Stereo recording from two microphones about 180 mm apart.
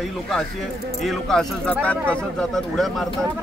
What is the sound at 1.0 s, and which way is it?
Speech, centre (ahead or behind).